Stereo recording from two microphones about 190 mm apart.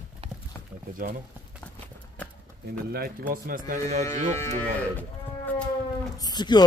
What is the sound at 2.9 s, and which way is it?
Speech, 50° right (ahead or behind).